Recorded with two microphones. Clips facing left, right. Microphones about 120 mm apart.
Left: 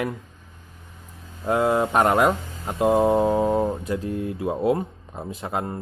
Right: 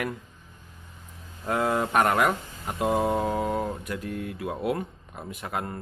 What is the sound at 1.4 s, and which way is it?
Speech, 20° left (ahead or behind).